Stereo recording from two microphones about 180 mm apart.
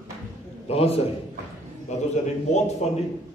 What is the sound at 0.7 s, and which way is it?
Speech, 35° left (ahead or behind).